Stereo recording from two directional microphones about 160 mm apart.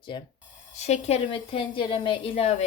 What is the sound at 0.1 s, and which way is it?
Speech, 30° left (ahead or behind).